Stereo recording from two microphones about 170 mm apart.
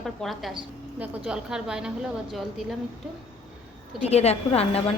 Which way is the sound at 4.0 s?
40° left (ahead or behind).